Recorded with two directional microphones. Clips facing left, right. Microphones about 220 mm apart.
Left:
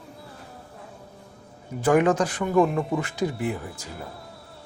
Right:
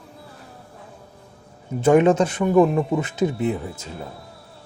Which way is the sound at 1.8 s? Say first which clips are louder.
Right 4 dB; 25° right (ahead or behind).